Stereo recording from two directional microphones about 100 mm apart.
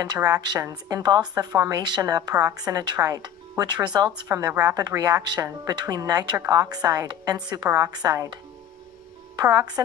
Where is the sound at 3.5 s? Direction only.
40° right (ahead or behind).